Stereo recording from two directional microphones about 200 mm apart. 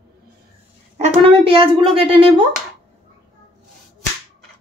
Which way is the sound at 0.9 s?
30° right (ahead or behind).